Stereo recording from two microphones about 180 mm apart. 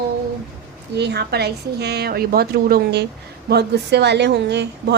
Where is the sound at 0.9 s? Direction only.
65° right (ahead or behind).